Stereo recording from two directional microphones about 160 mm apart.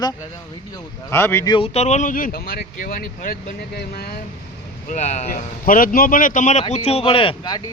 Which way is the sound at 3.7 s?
80° left.